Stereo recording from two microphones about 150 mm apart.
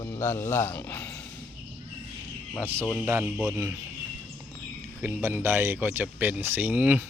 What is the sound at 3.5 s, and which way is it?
Rub, 20° right (ahead or behind).